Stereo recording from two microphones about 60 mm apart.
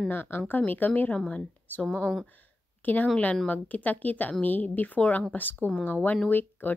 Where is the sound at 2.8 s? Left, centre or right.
Left.